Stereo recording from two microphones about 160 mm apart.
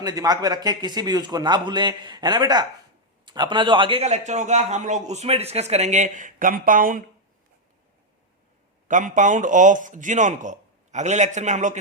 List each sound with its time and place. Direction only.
0.0 s a man's voice: 25° right (ahead or behind); by 7.0 s 60° right (ahead or behind)
8.9 s a man's voice: 55° right (ahead or behind)